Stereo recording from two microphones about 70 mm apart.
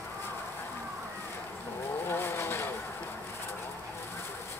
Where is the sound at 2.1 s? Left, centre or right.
Left.